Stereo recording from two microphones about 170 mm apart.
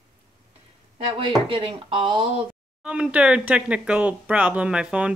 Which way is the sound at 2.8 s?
5° right (ahead or behind).